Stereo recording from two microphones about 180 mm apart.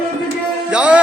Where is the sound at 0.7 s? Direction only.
5° right (ahead or behind).